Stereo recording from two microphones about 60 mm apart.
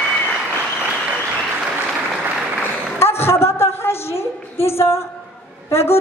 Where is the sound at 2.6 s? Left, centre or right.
Left.